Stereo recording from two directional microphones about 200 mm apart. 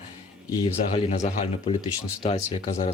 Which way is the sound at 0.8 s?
35° left (ahead or behind).